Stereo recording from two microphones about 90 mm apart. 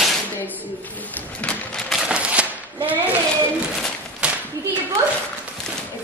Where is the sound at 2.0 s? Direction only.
10° right (ahead or behind).